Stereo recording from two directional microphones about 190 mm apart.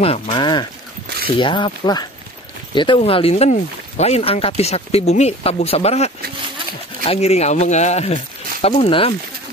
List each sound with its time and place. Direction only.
0.0 s speech: 30° left (ahead or behind)